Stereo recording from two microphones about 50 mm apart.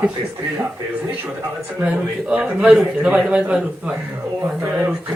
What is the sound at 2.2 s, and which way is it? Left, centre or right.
A man's voice, right.